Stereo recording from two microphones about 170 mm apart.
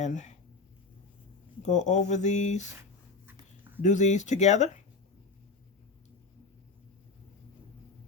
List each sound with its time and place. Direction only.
0.0 s speech: 45° left (ahead or behind)
1.6 s speech: 45° left (ahead or behind)
3.8 s speech: 45° left (ahead or behind)